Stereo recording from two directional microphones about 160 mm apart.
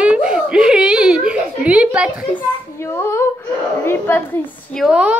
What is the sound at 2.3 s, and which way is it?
A child's voice, 15° left (ahead or behind).